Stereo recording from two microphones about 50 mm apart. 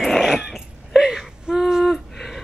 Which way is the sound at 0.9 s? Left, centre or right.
Centre.